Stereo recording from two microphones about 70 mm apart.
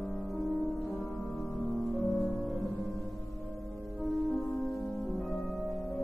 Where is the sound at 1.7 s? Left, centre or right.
Centre.